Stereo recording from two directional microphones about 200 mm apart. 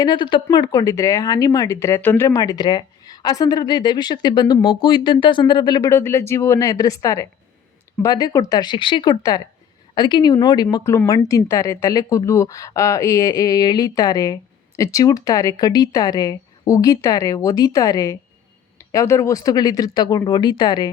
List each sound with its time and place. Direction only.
0.0 s speech: 20° left (ahead or behind)